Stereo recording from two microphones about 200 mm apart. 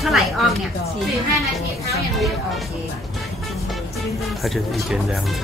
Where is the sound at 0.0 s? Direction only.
Centre (ahead or behind).